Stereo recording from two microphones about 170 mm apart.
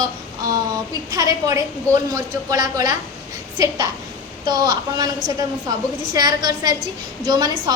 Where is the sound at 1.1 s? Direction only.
20° right (ahead or behind).